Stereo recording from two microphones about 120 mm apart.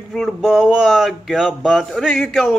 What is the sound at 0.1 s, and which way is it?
Speech, 5° right (ahead or behind).